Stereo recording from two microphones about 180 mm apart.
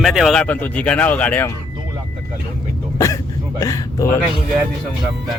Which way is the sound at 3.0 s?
20° left (ahead or behind).